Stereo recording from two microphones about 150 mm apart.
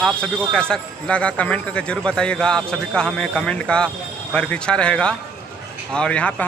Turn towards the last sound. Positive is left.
turn(degrees=10)  # may be behind; listen again after turning